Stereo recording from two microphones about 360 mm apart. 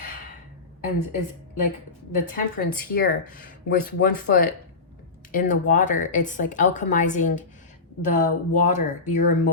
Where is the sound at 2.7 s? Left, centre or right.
Left.